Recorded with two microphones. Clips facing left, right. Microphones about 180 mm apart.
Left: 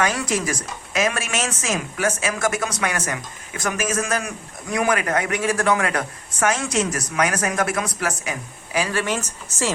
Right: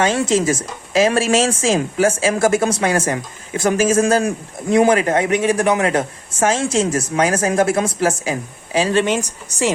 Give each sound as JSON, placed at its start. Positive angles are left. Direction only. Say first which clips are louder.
{"t": 0.0, "sound": "speech", "louder": "right 6 dB", "side_deg": -25}